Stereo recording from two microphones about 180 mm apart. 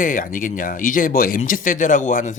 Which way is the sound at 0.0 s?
50° left (ahead or behind).